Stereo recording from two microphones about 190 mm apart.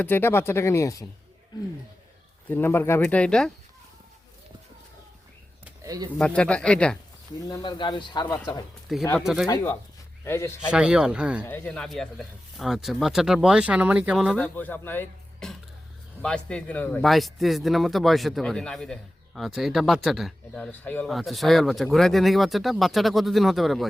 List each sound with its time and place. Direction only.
0.0 s speech: 10° left (ahead or behind)
2.5 s speech: 10° left (ahead or behind)
5.8 s a sound: 20° right (ahead or behind)
6.1 s speech: 5° left (ahead or behind)
7.4 s speech: 20° left (ahead or behind)
9.1 s speech: centre (ahead or behind)
9.5 s speech: 15° left (ahead or behind)
10.7 s speech: 5° right (ahead or behind)
11.4 s speech: 10° left (ahead or behind)